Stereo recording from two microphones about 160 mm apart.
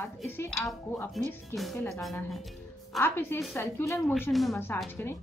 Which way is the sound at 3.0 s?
15° left (ahead or behind).